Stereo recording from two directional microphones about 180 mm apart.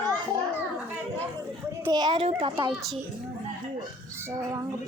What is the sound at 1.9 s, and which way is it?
Speech, 25° right (ahead or behind).